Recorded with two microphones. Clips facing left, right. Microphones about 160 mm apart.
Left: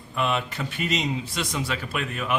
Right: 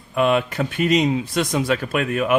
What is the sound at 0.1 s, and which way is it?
Speech, 55° right (ahead or behind).